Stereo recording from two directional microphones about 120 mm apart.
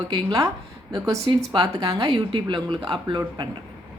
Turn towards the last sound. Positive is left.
turn(degrees=-40)  # may be behind; listen again after turning